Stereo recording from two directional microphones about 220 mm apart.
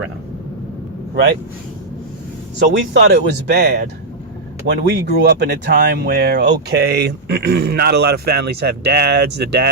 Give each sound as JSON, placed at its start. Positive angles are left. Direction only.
{"t": 2.9, "sound": "speech", "side_deg": -55}